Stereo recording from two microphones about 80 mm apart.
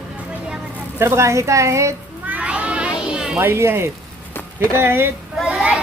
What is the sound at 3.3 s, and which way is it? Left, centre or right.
A woman's voice, right.